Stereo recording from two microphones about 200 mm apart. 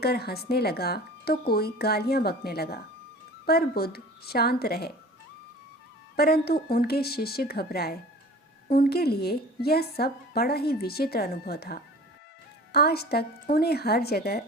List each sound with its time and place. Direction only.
0.0 s a woman's voice: 50° left (ahead or behind)
6.1 s a woman's voice: 50° left (ahead or behind)